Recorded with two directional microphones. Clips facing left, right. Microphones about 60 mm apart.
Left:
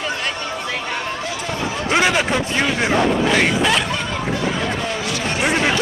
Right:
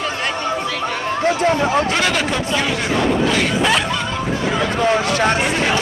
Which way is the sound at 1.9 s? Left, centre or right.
Centre.